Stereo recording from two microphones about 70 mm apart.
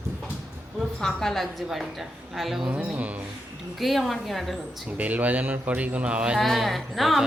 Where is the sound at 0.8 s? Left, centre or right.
Centre.